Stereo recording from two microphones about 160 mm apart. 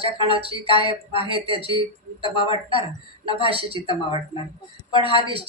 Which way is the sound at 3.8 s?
35° left (ahead or behind).